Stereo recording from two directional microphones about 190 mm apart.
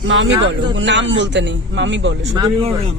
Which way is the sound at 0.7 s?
75° right (ahead or behind).